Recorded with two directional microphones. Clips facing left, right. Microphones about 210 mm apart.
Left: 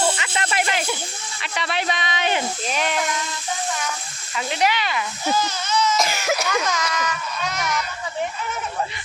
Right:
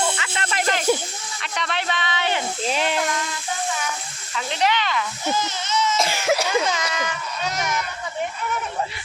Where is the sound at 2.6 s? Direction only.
25° right (ahead or behind).